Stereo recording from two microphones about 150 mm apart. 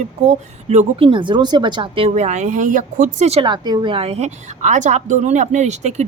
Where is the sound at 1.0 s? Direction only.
35° right (ahead or behind); by 3.3 s 60° right (ahead or behind).